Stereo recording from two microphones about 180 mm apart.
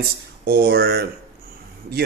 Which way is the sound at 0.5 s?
65° right (ahead or behind).